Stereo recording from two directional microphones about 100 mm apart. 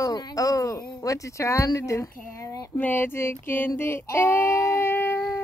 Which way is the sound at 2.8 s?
20° left (ahead or behind).